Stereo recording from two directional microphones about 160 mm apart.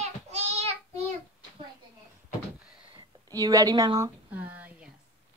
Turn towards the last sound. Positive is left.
turn(degrees=-10)  # may be behind; listen again after turning